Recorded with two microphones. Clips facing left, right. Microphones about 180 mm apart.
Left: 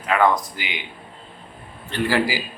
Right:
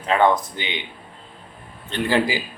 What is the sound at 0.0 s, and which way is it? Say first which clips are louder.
Speech: right 1 dB; 25° right (ahead or behind).